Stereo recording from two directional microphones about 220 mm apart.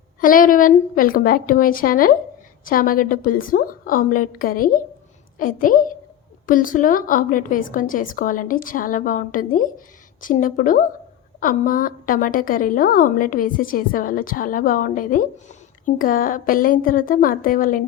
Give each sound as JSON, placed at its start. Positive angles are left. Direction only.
{"t": 0.2, "sound": "a woman's voice", "side_deg": 40}